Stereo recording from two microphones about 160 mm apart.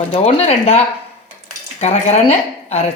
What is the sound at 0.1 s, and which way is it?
Speech, 40° left (ahead or behind).